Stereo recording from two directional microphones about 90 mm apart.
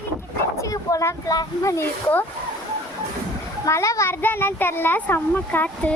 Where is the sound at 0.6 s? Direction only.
35° left (ahead or behind).